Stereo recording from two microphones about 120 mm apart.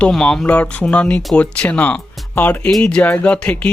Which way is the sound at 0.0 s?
5° left (ahead or behind).